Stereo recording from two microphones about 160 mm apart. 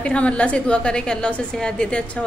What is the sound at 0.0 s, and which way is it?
A woman's voice, 5° left (ahead or behind).